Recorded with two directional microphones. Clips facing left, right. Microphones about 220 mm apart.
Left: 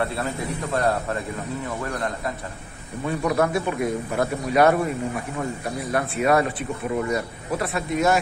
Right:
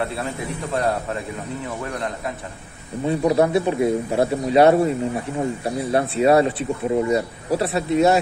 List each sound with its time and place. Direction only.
3.0 s a man's voice: 30° right (ahead or behind)